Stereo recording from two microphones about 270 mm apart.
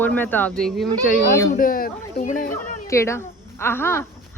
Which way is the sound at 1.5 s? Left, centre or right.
Left.